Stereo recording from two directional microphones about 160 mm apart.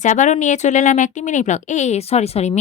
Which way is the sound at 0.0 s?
50° left (ahead or behind).